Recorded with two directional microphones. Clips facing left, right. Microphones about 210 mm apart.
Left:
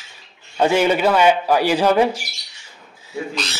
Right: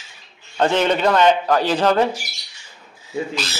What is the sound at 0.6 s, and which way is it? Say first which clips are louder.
A man's voice: left 1 dB; 10° left (ahead or behind).